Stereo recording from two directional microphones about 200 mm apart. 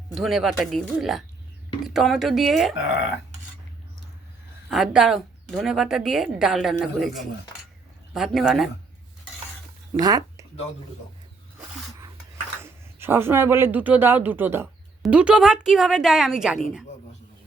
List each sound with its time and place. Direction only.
0.1 s a woman's voice: centre (ahead or behind)
4.7 s a woman's voice: 5° right (ahead or behind)
9.9 s speech: 20° right (ahead or behind)
12.6 s a man's voice: 10° right (ahead or behind)